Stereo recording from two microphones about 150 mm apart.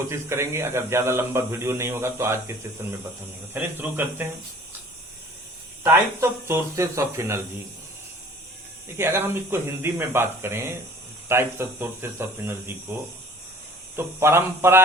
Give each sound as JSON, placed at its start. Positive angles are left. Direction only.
{"t": 0.0, "sound": "speech", "side_deg": -20}
{"t": 5.8, "sound": "speech", "side_deg": -15}
{"t": 9.0, "sound": "speech", "side_deg": -15}